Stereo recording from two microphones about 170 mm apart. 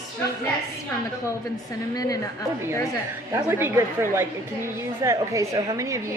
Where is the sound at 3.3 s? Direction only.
10° right (ahead or behind).